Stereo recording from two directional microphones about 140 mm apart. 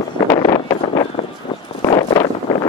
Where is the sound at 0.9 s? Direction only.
45° left (ahead or behind).